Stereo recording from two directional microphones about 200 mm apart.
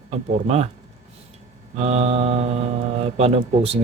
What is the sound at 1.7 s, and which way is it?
Speech, 30° right (ahead or behind).